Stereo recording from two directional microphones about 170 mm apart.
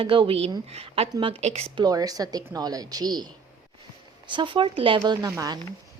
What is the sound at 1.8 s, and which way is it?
A woman's voice, 20° right (ahead or behind).